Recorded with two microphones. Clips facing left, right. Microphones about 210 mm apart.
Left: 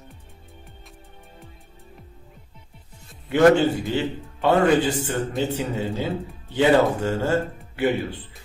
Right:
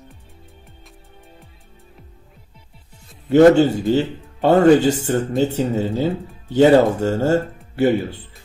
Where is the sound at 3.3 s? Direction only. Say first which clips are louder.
Right 5 dB; 40° right (ahead or behind).